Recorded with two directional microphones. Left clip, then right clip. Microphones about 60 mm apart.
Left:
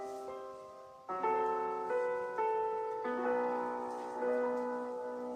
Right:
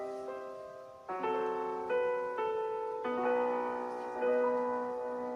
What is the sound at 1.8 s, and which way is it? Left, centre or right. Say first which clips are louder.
Music: right 6 dB; centre.